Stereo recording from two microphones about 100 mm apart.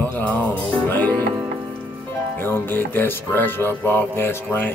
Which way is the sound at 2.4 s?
20° left (ahead or behind).